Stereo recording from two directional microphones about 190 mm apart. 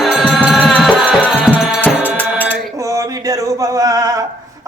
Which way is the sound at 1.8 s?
10° left (ahead or behind).